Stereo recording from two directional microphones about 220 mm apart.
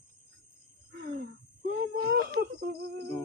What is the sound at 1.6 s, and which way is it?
Whimper, 45° right (ahead or behind).